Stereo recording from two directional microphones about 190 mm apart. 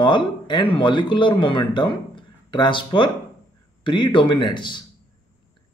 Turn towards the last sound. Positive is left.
turn(degrees=25)  # may be behind; listen again after turning